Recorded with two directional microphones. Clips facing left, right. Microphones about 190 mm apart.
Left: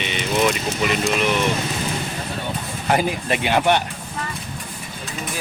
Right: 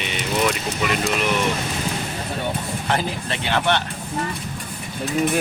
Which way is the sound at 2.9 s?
15° left (ahead or behind).